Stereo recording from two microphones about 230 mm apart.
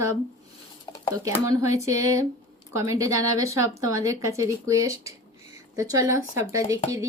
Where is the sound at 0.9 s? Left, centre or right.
Centre.